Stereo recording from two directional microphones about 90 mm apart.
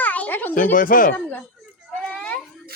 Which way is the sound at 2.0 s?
10° left (ahead or behind).